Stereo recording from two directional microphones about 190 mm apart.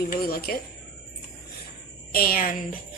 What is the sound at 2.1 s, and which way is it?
Speech, 50° left (ahead or behind).